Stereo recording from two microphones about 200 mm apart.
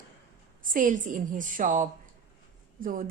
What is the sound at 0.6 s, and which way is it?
A woman's voice, 40° right (ahead or behind).